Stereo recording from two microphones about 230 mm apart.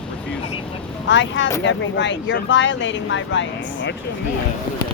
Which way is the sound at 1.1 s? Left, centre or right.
Left.